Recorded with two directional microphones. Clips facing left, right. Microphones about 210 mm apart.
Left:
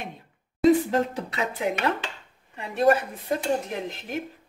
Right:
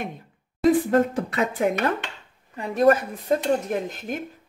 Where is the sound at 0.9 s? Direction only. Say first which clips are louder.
Right 5 dB; 50° right (ahead or behind).